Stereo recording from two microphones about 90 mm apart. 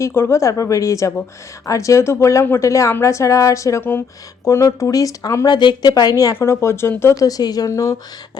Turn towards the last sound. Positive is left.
turn(degrees=40)  # may be behind; listen again after turning